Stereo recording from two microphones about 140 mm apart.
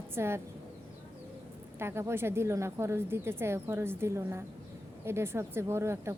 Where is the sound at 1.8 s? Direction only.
20° right (ahead or behind).